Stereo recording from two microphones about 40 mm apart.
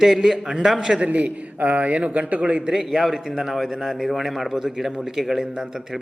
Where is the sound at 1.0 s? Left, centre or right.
Right.